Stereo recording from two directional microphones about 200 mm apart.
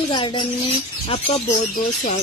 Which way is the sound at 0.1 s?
20° left (ahead or behind).